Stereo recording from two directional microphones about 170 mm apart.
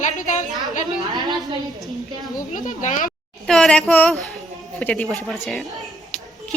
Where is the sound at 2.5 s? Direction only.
45° left (ahead or behind).